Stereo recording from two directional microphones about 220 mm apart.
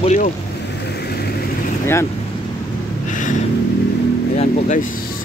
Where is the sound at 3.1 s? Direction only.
35° left (ahead or behind).